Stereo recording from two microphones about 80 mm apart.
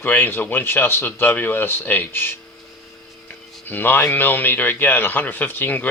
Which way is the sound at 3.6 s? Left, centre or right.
Left.